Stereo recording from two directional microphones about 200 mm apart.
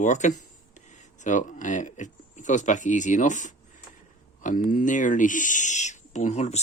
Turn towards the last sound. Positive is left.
turn(degrees=35)  # may be behind; listen again after turning